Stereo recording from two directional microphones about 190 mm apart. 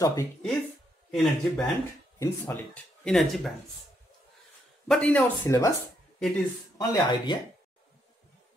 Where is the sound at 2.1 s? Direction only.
15° left (ahead or behind).